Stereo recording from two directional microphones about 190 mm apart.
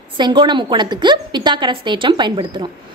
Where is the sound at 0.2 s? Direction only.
25° right (ahead or behind).